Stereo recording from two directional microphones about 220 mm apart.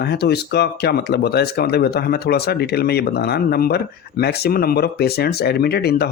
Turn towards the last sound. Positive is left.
turn(degrees=45)  # may be behind; listen again after turning